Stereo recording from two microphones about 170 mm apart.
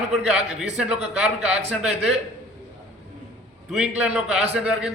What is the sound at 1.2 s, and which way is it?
Speech, 40° right (ahead or behind).